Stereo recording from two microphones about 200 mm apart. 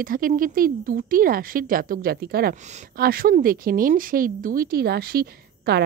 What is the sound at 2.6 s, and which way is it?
A woman's voice, 35° right (ahead or behind).